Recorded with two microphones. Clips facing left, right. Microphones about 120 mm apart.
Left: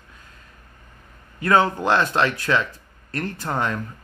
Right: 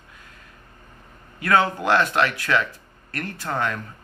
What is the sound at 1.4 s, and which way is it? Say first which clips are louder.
A man's voice: left 2 dB; 25° left (ahead or behind).